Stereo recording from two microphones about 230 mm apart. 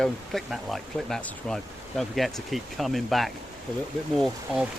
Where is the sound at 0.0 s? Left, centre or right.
Centre.